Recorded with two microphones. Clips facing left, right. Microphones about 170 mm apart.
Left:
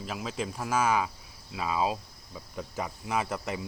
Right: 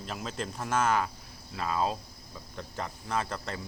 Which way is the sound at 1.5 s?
5° left (ahead or behind).